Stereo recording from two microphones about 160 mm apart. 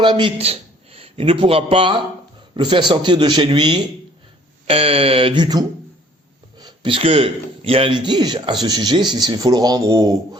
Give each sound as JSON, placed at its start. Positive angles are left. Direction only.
{"t": 0.0, "sound": "a man's voice", "side_deg": -30}